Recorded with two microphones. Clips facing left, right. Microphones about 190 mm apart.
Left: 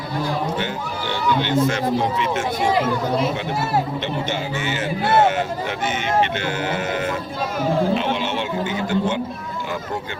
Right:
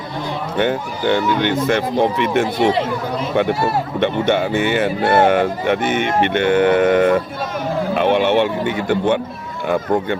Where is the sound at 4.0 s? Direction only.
60° right (ahead or behind).